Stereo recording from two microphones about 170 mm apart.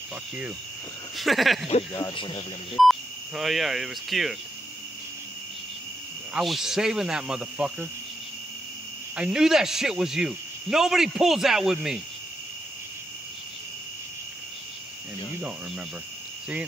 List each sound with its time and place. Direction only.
1.1 s speech: centre (ahead or behind)
2.0 s speech: 25° left (ahead or behind)
2.7 s speech: centre (ahead or behind)
6.3 s speech: centre (ahead or behind)
9.1 s speech: 5° right (ahead or behind)